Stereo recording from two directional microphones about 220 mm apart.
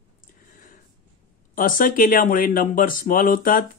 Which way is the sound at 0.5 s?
35° left (ahead or behind).